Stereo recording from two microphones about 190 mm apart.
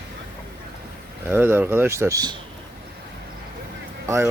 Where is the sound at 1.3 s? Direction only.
10° right (ahead or behind).